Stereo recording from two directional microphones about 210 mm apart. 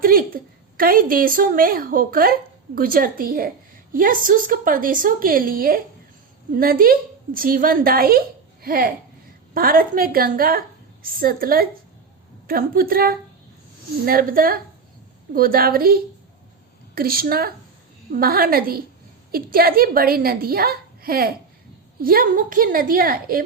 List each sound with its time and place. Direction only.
0.0 s a woman's voice: 40° right (ahead or behind)